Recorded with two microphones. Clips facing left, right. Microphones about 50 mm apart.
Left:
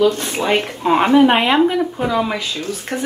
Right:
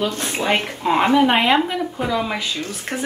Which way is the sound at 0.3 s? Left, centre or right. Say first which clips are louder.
Left 2 dB; centre.